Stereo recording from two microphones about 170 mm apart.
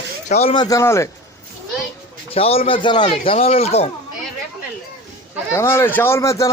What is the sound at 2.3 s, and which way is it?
Speech, 35° left (ahead or behind).